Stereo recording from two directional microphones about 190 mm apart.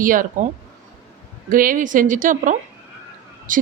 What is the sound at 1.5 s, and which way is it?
Speech, 45° right (ahead or behind).